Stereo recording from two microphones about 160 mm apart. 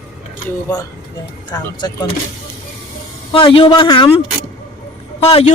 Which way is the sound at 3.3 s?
35° left (ahead or behind).